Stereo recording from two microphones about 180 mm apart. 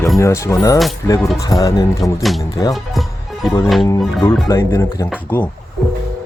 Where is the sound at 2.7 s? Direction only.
Centre (ahead or behind).